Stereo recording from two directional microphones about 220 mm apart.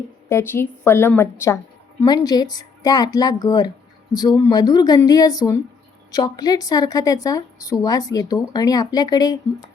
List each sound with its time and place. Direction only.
0.3 s a woman's voice: 10° left (ahead or behind)